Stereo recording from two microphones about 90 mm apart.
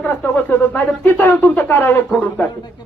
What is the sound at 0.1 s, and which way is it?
Speech, 20° left (ahead or behind).